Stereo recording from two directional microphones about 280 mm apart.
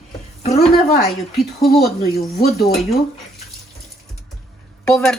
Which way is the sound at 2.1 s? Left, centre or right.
Left.